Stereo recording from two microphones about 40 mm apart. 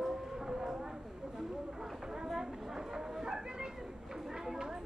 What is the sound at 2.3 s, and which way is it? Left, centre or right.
A woman's voice, centre.